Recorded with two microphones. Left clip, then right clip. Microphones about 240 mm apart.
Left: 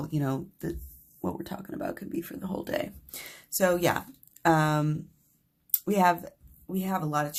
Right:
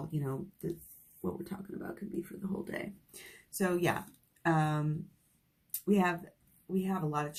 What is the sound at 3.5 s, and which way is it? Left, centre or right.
Speech, left.